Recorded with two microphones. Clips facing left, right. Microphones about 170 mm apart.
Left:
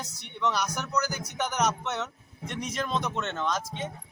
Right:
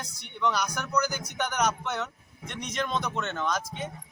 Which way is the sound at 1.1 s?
30° left (ahead or behind).